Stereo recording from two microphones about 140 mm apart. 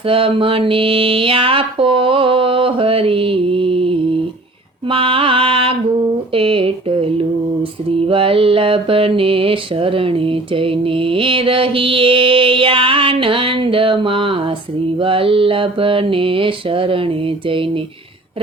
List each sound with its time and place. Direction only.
0.1 s mantra: 40° right (ahead or behind)
6.3 s speech: 40° right (ahead or behind)
7.9 s mantra: 40° right (ahead or behind)